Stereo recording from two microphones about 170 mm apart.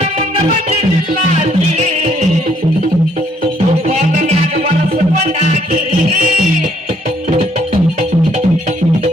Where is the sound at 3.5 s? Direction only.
35° right (ahead or behind).